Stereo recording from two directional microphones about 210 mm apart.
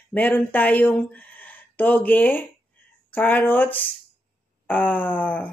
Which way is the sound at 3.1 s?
10° left (ahead or behind).